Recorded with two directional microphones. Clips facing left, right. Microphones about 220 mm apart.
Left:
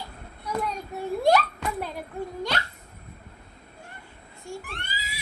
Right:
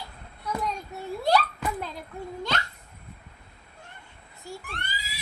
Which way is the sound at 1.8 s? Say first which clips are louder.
Left 4 dB; 10° left (ahead or behind).